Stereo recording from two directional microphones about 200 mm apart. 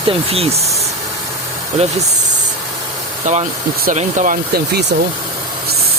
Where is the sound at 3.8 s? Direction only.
40° right (ahead or behind).